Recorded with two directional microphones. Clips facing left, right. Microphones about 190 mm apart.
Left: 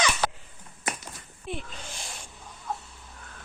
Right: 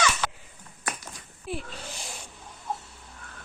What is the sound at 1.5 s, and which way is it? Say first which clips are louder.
Snake: right 2 dB; 5° right (ahead or behind).